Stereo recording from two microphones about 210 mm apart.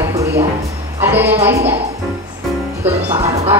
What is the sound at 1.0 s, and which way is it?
Speech, 10° right (ahead or behind).